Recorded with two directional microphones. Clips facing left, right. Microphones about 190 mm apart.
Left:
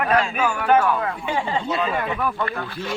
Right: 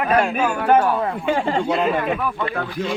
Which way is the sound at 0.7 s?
35° right (ahead or behind).